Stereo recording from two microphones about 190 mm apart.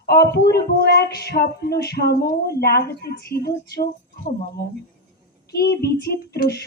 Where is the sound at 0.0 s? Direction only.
55° left (ahead or behind).